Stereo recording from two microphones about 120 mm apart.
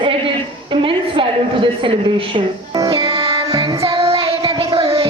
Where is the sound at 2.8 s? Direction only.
50° right (ahead or behind).